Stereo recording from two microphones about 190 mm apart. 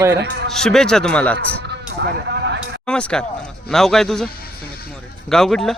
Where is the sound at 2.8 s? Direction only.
5° left (ahead or behind).